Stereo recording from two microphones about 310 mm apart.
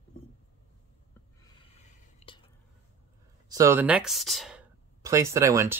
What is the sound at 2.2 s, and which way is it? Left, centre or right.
Whispering, left.